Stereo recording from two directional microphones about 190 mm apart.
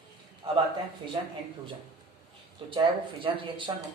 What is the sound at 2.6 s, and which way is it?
A man's voice, 25° right (ahead or behind).